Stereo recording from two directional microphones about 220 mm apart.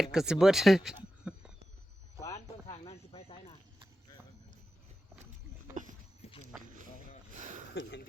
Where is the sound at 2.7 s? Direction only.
25° left (ahead or behind).